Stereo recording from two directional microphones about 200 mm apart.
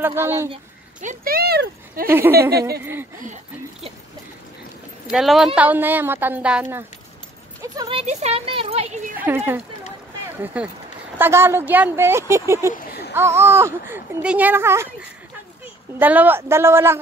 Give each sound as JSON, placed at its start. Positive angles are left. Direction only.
{"t": 0.0, "sound": "speech", "side_deg": -10}
{"t": 1.0, "sound": "speech", "side_deg": -50}
{"t": 2.0, "sound": "speech", "side_deg": -10}
{"t": 5.0, "sound": "speech", "side_deg": 0}
{"t": 7.9, "sound": "speech", "side_deg": -35}
{"t": 9.1, "sound": "speech", "side_deg": -10}
{"t": 12.7, "sound": "a sound", "side_deg": 50}
{"t": 13.1, "sound": "speech", "side_deg": -10}